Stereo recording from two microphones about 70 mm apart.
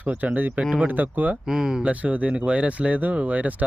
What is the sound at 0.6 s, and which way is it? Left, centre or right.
Speech, centre.